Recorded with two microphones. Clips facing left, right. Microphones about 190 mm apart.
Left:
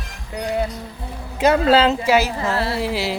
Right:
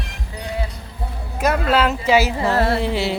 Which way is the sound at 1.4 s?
30° left (ahead or behind).